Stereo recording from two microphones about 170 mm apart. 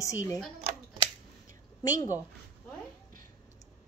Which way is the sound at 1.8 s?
20° left (ahead or behind).